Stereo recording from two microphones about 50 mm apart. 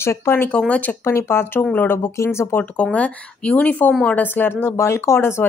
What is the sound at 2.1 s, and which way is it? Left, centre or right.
Speech, left.